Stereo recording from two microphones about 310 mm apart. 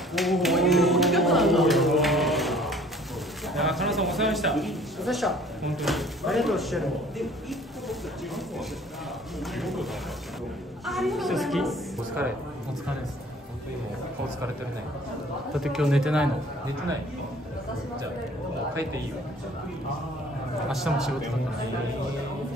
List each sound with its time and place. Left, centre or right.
0.1 s a sound: centre
3.5 s a man's voice: centre
9.6 s a woman's voice: centre
10.9 s a woman's voice: centre
15.6 s a woman's voice: centre
20.6 s a woman's voice: centre